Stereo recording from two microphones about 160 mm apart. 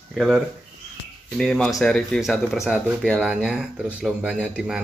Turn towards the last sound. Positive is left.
turn(degrees=-5)  # may be behind; listen again after turning